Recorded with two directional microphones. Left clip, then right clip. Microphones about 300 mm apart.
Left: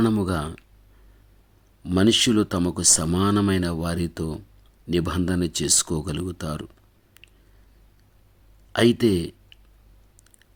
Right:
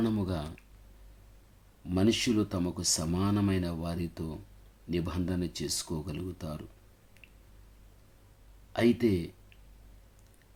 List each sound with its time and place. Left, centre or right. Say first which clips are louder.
0.0 s speech: left 9 dB; left
1.8 s speech: left 9 dB; left
8.7 s speech: left 8 dB; left